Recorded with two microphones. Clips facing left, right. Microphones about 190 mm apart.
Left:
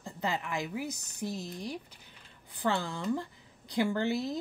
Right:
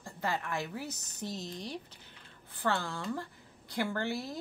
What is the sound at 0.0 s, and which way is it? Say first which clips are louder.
A woman's voice: left 1 dB; 20° left (ahead or behind).